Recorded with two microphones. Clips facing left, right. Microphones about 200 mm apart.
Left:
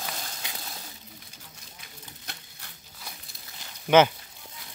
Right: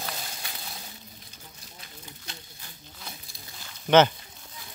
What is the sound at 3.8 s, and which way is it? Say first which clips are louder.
Speech: even; 10° left (ahead or behind).